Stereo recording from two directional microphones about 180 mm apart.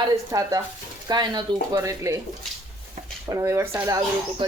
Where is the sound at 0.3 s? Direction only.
20° right (ahead or behind).